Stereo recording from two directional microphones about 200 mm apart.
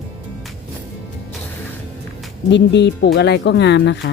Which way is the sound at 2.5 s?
60° left (ahead or behind).